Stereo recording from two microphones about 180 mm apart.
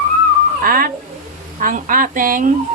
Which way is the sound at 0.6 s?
55° right (ahead or behind).